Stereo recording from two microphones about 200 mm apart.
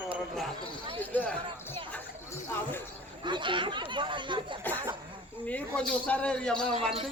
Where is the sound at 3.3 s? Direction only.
25° right (ahead or behind).